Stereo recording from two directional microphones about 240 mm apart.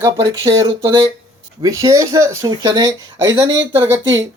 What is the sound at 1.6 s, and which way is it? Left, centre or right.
Speech, centre.